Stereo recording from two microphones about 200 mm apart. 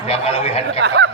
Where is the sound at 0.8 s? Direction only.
60° right (ahead or behind).